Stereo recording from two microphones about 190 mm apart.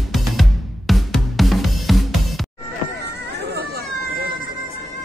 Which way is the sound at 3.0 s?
60° right (ahead or behind).